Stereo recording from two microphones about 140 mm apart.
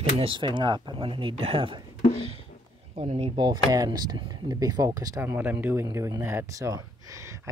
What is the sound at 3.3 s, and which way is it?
Speech, 30° right (ahead or behind).